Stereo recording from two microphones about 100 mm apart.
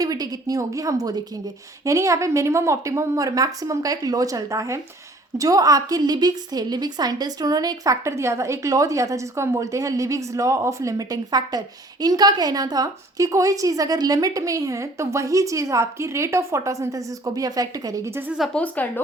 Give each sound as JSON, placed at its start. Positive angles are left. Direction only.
{"t": 0.0, "sound": "a woman's voice", "side_deg": -40}
{"t": 18.5, "sound": "speech", "side_deg": 15}